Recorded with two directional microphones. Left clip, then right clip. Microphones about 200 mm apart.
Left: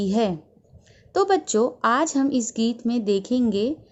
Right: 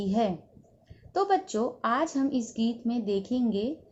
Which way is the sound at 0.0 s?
55° left (ahead or behind).